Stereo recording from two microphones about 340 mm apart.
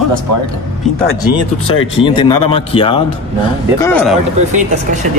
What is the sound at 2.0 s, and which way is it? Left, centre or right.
Speech, centre.